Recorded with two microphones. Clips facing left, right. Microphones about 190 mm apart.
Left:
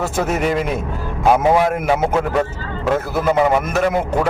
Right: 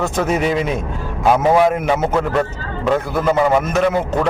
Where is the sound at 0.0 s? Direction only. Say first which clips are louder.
Right 1 dB; 5° left (ahead or behind).